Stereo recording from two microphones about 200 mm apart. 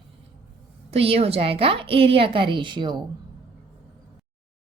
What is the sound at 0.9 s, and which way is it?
A woman's voice, 30° right (ahead or behind).